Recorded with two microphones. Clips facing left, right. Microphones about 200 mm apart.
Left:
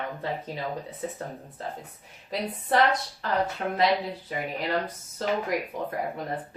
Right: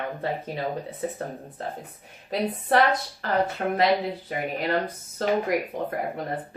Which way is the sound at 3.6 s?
45° right (ahead or behind).